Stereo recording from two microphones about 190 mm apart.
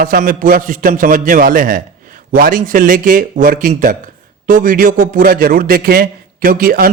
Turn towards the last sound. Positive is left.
turn(degrees=-50)  # may be behind; listen again after turning